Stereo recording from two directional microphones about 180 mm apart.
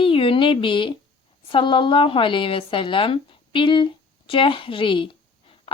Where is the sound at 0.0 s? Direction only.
30° left (ahead or behind).